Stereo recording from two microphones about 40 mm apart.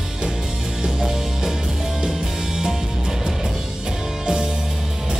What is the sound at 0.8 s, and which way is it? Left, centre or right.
Music, centre.